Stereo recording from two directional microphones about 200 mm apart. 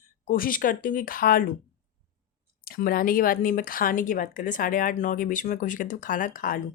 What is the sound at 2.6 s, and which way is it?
Speech, 45° left (ahead or behind).